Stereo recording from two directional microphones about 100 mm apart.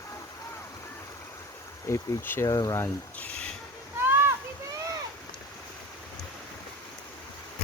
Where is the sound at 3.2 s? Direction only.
15° left (ahead or behind).